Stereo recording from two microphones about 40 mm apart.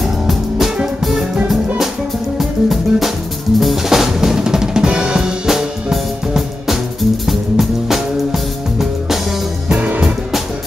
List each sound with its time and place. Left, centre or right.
0.0 s music: centre
2.3 s music: centre
3.5 s drum kit: centre
5.5 s music: centre
9.8 s music: right